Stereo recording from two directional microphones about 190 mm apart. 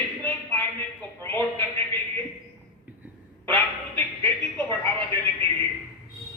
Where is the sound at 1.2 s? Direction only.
10° left (ahead or behind).